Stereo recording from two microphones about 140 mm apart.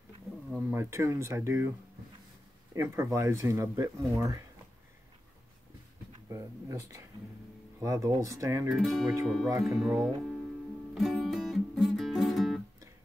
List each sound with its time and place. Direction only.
0.5 s speech: 10° right (ahead or behind)
6.2 s speech: 25° right (ahead or behind)
8.6 s speech: centre (ahead or behind)
11.0 s music: centre (ahead or behind)